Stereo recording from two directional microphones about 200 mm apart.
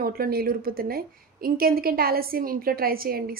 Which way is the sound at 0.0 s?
50° right (ahead or behind).